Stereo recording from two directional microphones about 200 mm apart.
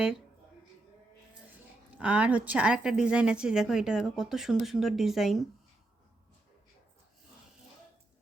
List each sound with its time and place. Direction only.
1.5 s a woman's voice: 5° right (ahead or behind)